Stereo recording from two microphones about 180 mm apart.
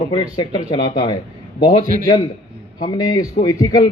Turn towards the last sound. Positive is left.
turn(degrees=25)  # may be behind; listen again after turning